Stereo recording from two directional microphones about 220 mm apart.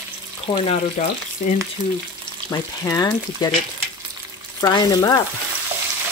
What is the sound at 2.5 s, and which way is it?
Speech, 15° left (ahead or behind).